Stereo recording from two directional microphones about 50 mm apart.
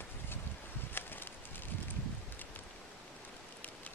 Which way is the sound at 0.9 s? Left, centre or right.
Left.